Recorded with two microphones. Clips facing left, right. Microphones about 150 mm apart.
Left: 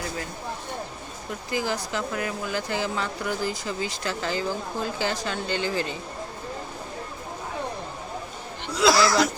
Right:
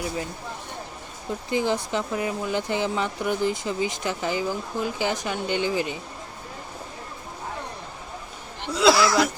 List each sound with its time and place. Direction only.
1.3 s speech: 25° right (ahead or behind)
9.0 s speech: 5° right (ahead or behind)